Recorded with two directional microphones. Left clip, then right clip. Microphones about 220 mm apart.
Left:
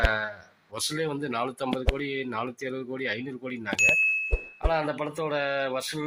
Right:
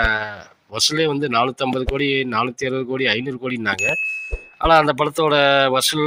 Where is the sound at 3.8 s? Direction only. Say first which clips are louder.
Right 1 dB; centre (ahead or behind).